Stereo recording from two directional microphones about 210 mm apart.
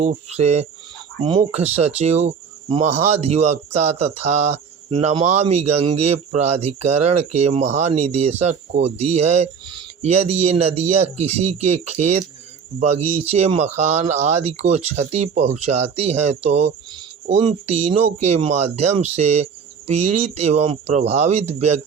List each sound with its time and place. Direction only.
0.0 s speech: 30° right (ahead or behind)
4.9 s speech: 20° right (ahead or behind)